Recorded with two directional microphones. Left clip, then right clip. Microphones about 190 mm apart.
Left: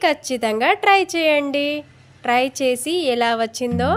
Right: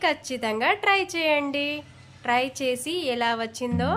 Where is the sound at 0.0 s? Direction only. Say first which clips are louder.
Left 6 dB; 25° left (ahead or behind).